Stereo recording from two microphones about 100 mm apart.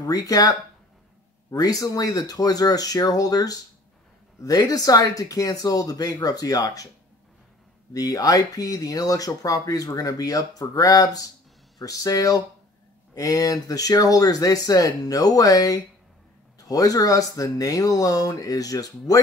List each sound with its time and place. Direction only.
0.0 s speech: 35° left (ahead or behind)
7.9 s speech: 35° left (ahead or behind)